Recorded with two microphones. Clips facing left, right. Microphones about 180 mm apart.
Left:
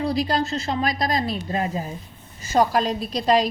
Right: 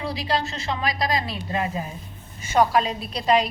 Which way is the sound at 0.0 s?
45° left (ahead or behind).